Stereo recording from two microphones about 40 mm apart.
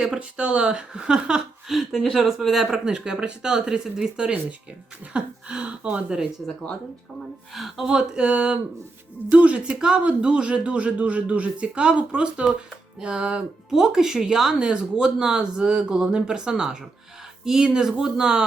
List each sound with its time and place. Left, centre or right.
0.0 s speech: right; by 2.6 s centre
2.7 s speech: centre
5.1 s speech: right
6.4 s speech: left
7.5 s speech: centre
7.9 s speech: right
9.7 s speech: centre
10.0 s speech: right
13.7 s speech: centre